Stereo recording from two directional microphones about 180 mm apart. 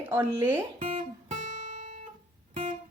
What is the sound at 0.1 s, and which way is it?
Speech, 15° right (ahead or behind).